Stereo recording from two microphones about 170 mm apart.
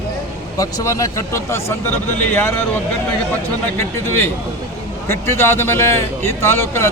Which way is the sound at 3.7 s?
15° left (ahead or behind).